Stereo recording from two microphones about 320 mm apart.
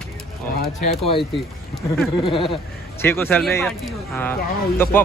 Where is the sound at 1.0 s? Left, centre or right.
Centre.